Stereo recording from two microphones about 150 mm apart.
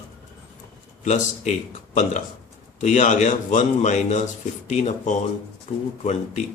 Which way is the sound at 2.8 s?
55° left (ahead or behind).